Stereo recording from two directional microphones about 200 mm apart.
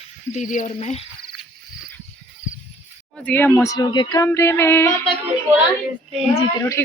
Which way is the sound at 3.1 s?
10° left (ahead or behind).